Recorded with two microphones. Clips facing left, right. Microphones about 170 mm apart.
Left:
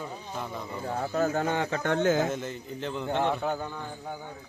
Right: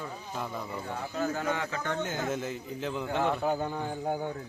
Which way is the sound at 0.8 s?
40° left (ahead or behind).